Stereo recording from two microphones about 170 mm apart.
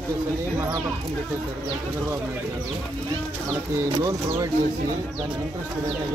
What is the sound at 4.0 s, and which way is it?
Speech, 20° right (ahead or behind).